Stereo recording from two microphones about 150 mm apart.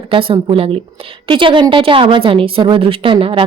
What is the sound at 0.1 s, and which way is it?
A woman's voice, 35° right (ahead or behind).